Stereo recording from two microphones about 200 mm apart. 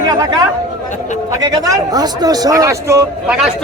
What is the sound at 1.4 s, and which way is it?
A man's voice, 20° right (ahead or behind).